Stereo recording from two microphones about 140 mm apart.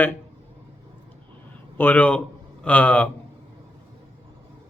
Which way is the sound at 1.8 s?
10° left (ahead or behind).